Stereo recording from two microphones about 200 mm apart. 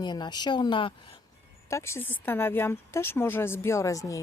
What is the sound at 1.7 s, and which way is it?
Speech, 15° left (ahead or behind).